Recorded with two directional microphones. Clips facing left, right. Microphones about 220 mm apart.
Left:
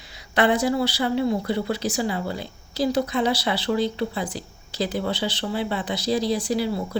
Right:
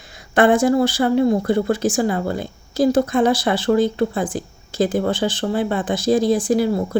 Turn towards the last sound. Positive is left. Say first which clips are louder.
# right 6 dB
turn(degrees=-50)  # may be behind; listen again after turning